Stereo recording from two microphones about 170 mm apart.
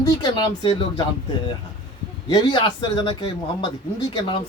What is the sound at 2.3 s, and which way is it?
Speech, 25° left (ahead or behind).